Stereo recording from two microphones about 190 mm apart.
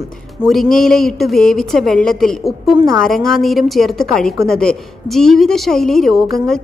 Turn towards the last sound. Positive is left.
turn(degrees=5)  # may be behind; listen again after turning